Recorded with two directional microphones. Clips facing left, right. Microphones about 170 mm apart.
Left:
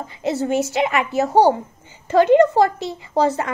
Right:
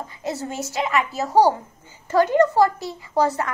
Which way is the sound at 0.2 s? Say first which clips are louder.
Left 9 dB; 25° left (ahead or behind).